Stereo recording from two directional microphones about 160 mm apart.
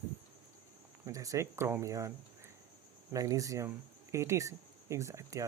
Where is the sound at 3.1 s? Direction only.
20° right (ahead or behind).